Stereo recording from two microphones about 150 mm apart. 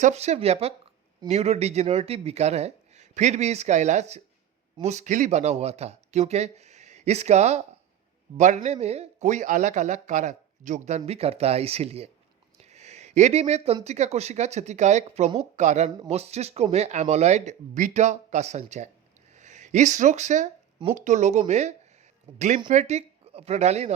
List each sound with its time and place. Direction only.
0.0 s speech: 45° right (ahead or behind)
12.5 s a sound: 45° right (ahead or behind)
13.8 s speech: 45° right (ahead or behind)